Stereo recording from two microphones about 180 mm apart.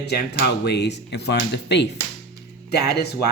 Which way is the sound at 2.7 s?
65° left (ahead or behind).